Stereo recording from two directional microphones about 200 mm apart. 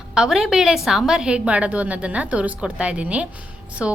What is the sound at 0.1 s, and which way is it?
A woman's voice, 5° right (ahead or behind).